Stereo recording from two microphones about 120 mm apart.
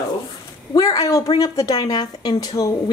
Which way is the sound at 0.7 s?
30° left (ahead or behind).